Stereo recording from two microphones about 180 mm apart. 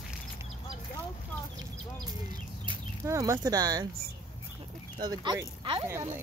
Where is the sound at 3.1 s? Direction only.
20° right (ahead or behind).